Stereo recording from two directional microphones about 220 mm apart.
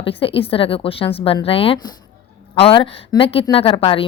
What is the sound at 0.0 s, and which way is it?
Speech, 25° left (ahead or behind).